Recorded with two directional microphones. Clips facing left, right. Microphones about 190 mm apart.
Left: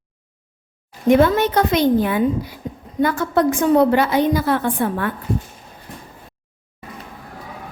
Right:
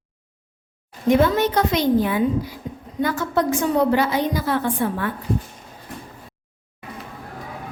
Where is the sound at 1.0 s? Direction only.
55° left (ahead or behind).